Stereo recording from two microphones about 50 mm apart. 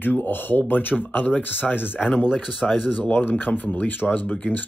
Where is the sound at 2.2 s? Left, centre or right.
Centre.